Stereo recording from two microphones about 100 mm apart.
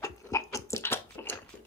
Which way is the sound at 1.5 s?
15° left (ahead or behind).